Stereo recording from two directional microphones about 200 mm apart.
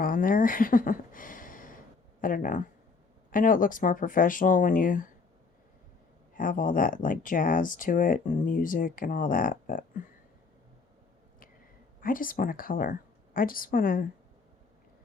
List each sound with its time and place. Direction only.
0.0 s speech: 45° left (ahead or behind)
6.3 s speech: 40° left (ahead or behind)
11.9 s speech: 45° left (ahead or behind)